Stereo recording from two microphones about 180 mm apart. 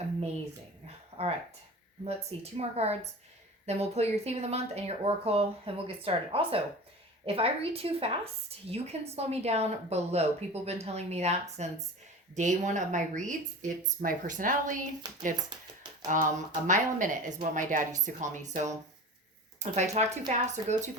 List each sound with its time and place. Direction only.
0.9 s a sound: 35° right (ahead or behind)
2.0 s a woman's voice: 35° right (ahead or behind)
16.0 s a woman's voice: 45° right (ahead or behind)